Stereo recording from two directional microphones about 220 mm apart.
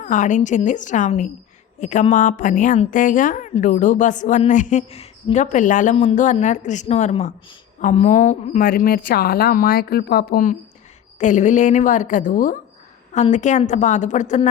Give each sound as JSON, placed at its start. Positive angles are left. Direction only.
{"t": 0.0, "sound": "a woman's voice", "side_deg": 35}